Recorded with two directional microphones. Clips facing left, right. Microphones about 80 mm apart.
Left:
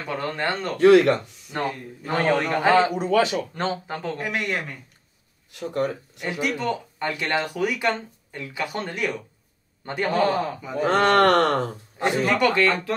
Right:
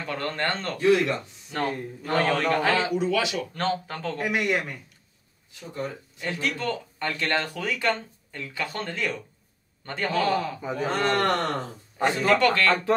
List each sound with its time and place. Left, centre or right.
0.0 s a man's voice: centre
0.7 s speech: left
1.5 s a man's voice: centre
3.0 s a man's voice: left
3.5 s speech: centre
4.2 s speech: centre
5.5 s speech: left
6.2 s speech: centre
10.1 s a man's voice: left
10.9 s speech: left
12.0 s speech: centre